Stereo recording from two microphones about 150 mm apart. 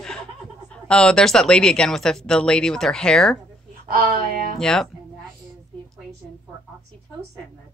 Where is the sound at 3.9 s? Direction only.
85° right.